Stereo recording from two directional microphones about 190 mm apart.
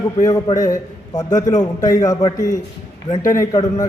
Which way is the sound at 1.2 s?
20° left (ahead or behind).